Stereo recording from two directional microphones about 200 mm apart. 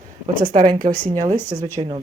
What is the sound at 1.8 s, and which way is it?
Speech, 25° right (ahead or behind).